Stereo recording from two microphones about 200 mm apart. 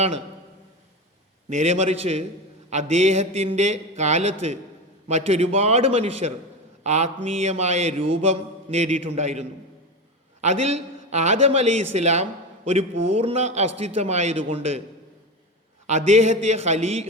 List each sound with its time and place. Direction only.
1.5 s a man's voice: 35° right (ahead or behind)
15.9 s a man's voice: 35° right (ahead or behind)